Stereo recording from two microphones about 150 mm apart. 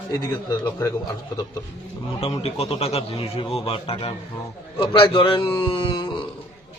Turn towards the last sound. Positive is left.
turn(degrees=35)  # may be behind; listen again after turning